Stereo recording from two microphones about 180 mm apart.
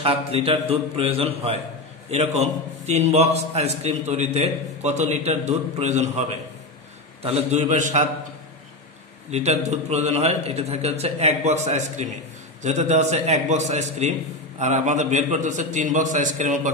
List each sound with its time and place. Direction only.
0.0 s a man's voice: 30° right (ahead or behind)
7.2 s a man's voice: 35° right (ahead or behind)
9.3 s a man's voice: 40° right (ahead or behind)